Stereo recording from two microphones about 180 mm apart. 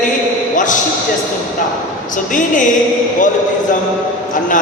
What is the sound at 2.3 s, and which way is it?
Speech, 45° left (ahead or behind).